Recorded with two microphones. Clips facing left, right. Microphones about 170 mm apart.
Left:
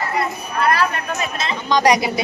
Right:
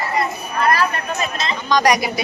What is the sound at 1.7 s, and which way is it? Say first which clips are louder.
Speech: left 1 dB; 25° left (ahead or behind).